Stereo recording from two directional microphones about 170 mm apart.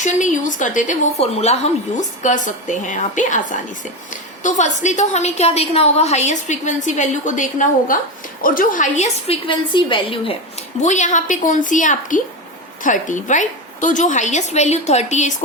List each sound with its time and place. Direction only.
0.0 s a woman's voice: 45° left (ahead or behind); by 10.3 s 30° left (ahead or behind)
10.8 s a woman's voice: 45° left (ahead or behind)